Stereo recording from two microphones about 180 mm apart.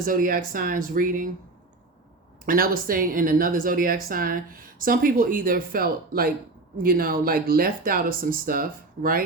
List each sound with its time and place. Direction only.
0.0 s a woman's voice: 50° right (ahead or behind)
2.5 s a woman's voice: 50° right (ahead or behind)